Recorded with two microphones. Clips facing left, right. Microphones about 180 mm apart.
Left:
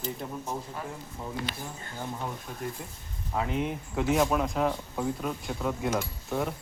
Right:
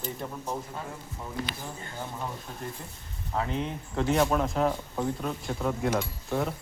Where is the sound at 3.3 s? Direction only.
10° left (ahead or behind).